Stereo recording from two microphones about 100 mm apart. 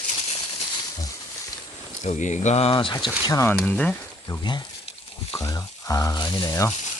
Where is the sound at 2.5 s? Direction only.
75° left (ahead or behind); by 2.9 s 60° left (ahead or behind).